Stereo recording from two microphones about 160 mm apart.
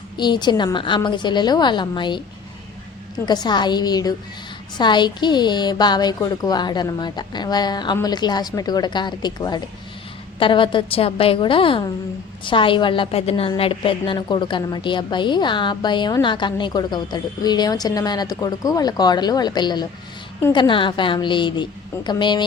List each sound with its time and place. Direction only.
0.2 s a woman's voice: 30° left (ahead or behind)
3.2 s a woman's voice: 25° left (ahead or behind)